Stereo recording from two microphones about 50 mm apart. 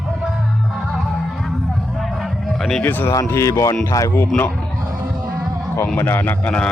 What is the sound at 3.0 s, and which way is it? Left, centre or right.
Speech, left.